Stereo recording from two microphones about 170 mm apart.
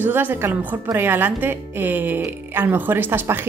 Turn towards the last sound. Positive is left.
turn(degrees=-15)  # may be behind; listen again after turning